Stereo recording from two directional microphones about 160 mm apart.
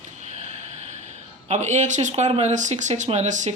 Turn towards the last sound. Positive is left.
turn(degrees=-50)  # may be behind; listen again after turning